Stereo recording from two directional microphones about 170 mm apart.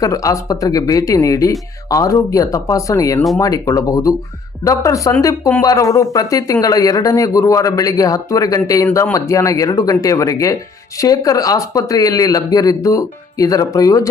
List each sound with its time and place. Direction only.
0.0 s speech: 20° left (ahead or behind)